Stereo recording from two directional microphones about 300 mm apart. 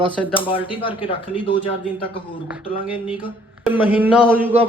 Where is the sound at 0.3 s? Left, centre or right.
Centre.